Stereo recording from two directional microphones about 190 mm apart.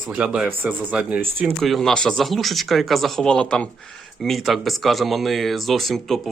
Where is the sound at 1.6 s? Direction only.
Centre (ahead or behind).